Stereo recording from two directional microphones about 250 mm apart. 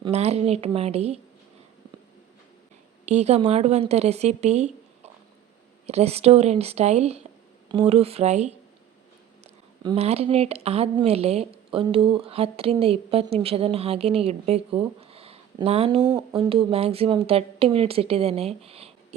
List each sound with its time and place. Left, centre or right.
0.0 s speech: right
3.1 s speech: right
5.8 s speech: right